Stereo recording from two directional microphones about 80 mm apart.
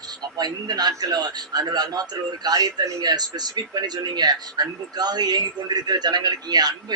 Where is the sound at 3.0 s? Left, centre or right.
Right.